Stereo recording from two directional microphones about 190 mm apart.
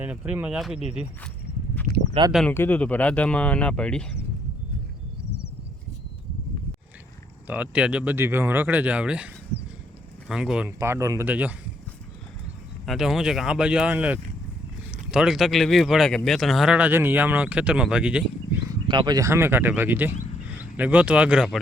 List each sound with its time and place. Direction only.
0.0 s speech: 10° right (ahead or behind)
2.2 s speech: 30° right (ahead or behind)
2.5 s speech: 10° left (ahead or behind)
7.4 s speech: 10° right (ahead or behind)
10.8 s speech: 15° right (ahead or behind)
12.8 s speech: centre (ahead or behind)
18.9 s speech: 25° right (ahead or behind); by 21.6 s 5° right (ahead or behind)